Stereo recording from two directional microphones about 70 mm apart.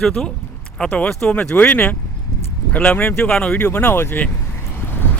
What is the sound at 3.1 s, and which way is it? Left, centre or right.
Speech, centre.